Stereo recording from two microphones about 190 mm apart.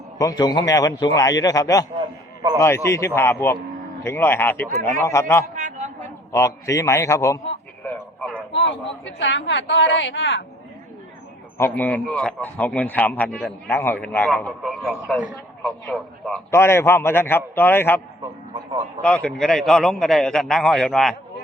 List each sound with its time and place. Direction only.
0.2 s a man's voice: 20° left (ahead or behind)
5.5 s a sound: 40° right (ahead or behind)
6.0 s a man's voice: 15° left (ahead or behind)
8.5 s speech: 65° left (ahead or behind)
11.5 s a man's voice: 10° left (ahead or behind)
16.5 s a man's voice: 15° left (ahead or behind)
19.0 s a man's voice: 5° left (ahead or behind)